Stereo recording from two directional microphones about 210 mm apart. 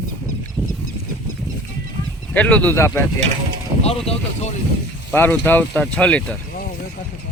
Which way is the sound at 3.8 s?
30° left (ahead or behind).